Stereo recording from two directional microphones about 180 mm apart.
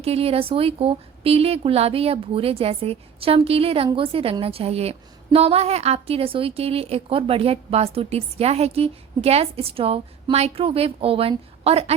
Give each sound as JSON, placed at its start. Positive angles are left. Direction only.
{"t": 0.0, "sound": "a woman's voice", "side_deg": -35}